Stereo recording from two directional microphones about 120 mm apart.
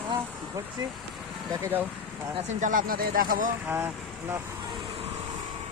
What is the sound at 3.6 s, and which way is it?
Speech, 20° right (ahead or behind).